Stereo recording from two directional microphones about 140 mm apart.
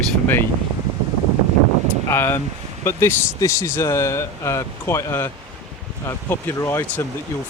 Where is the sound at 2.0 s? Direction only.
15° left (ahead or behind).